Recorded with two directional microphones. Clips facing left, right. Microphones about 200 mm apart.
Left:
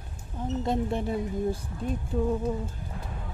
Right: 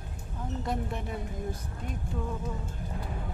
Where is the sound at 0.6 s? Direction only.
25° left (ahead or behind).